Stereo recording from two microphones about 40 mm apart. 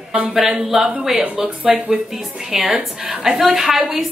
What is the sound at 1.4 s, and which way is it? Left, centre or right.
Speech, right.